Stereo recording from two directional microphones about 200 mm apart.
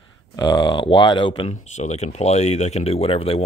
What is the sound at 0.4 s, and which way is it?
Speech, 20° left (ahead or behind).